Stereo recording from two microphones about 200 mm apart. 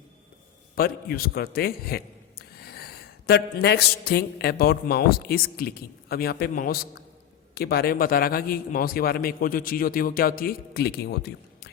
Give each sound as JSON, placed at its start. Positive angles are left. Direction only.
{"t": 0.8, "sound": "a man's voice", "side_deg": 50}